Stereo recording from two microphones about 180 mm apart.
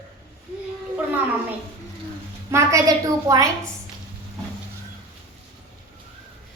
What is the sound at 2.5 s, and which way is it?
A woman's voice, 15° right (ahead or behind).